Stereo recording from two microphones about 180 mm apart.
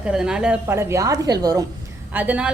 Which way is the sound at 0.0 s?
5° right (ahead or behind).